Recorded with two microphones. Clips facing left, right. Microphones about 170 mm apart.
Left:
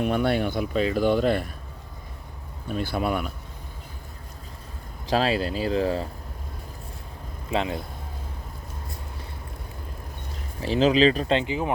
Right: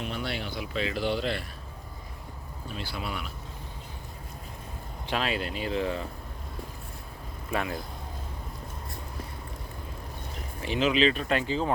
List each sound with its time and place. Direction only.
0.0 s speech: 55° left (ahead or behind)
2.6 s speech: 50° left (ahead or behind)
5.0 s speech: 35° left (ahead or behind)
7.5 s speech: 25° left (ahead or behind)
10.6 s speech: 35° left (ahead or behind)
11.3 s speech: 15° left (ahead or behind)